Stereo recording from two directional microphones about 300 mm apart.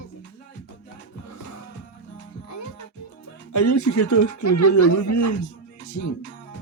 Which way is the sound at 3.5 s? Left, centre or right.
Left.